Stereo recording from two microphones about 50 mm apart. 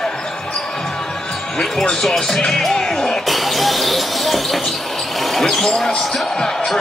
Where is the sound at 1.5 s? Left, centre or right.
Centre.